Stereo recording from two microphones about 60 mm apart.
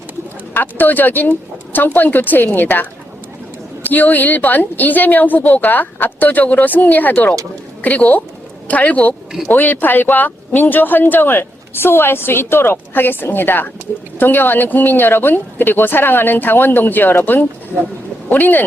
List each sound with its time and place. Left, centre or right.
0.5 s speech: left
3.8 s speech: left